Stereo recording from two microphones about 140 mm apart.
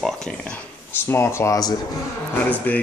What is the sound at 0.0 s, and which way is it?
Speech, 5° left (ahead or behind).